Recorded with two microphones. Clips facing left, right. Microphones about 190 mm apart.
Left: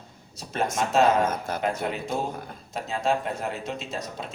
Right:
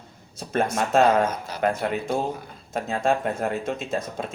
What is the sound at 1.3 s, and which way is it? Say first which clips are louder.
Speech: left 3 dB; 50° left (ahead or behind).